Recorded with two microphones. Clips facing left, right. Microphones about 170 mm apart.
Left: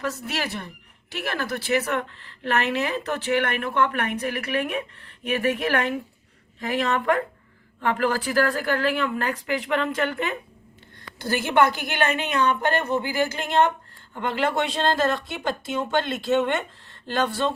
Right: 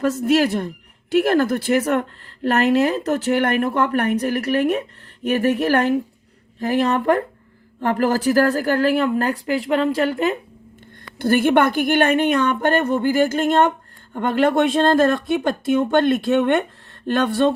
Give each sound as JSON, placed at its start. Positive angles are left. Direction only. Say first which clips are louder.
{"t": 0.0, "sound": "speech", "louder": "right 12 dB", "side_deg": -50}
{"t": 11.2, "sound": "speech", "louder": "right 5 dB", "side_deg": -55}